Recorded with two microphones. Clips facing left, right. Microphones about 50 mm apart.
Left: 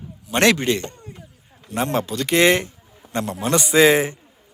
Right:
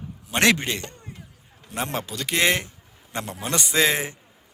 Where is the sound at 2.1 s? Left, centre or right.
Centre.